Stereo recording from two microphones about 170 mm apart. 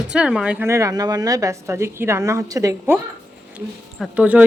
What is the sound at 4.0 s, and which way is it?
Speech, 10° right (ahead or behind).